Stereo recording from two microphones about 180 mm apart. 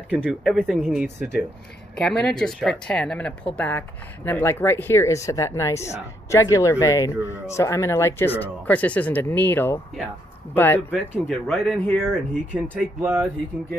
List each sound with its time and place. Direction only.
0.1 s speech: 5° right (ahead or behind); by 10.8 s 10° left (ahead or behind)
10.9 s speech: centre (ahead or behind)